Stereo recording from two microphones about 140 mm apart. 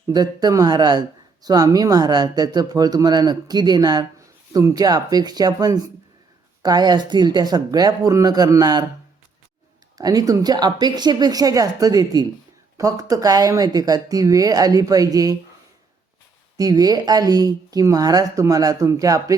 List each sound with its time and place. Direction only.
0.1 s speech: 30° right (ahead or behind)
10.0 s speech: 25° right (ahead or behind)
16.6 s speech: 25° right (ahead or behind)